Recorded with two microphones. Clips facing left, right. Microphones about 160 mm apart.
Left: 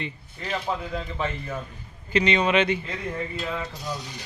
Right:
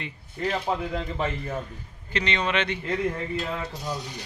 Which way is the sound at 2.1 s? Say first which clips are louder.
Left 5 dB; 10° left (ahead or behind).